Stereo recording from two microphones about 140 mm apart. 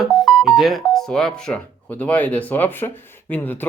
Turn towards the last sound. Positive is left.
turn(degrees=15)  # may be behind; listen again after turning